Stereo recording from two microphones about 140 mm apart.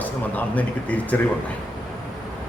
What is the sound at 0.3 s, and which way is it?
Speech, 10° left (ahead or behind).